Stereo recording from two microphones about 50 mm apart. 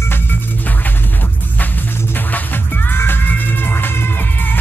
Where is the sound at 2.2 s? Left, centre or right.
Left.